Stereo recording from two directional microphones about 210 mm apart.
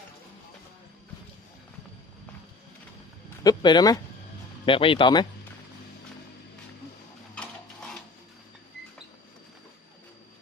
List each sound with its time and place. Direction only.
3.4 s speech: 20° left (ahead or behind)